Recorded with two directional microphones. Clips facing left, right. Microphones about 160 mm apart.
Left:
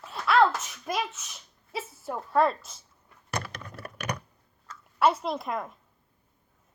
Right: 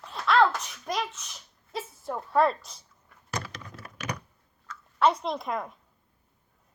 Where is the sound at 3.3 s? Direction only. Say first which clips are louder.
Left 1 dB; 60° left (ahead or behind).